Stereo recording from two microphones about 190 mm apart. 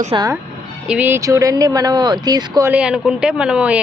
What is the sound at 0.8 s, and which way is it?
Speech, 10° right (ahead or behind).